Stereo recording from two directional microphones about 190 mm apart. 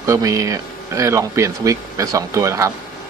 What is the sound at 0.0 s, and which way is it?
Speech, 15° right (ahead or behind).